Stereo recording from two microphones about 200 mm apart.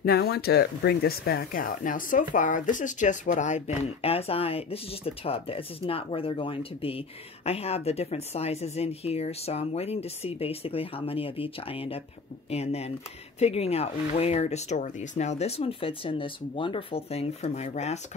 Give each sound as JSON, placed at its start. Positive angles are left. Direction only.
{"t": 0.0, "sound": "speech", "side_deg": 50}